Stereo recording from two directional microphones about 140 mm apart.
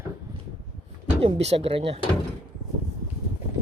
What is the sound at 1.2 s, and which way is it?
Speech, 45° right (ahead or behind).